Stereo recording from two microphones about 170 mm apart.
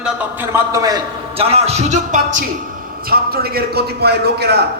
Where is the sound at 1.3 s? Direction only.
35° right (ahead or behind).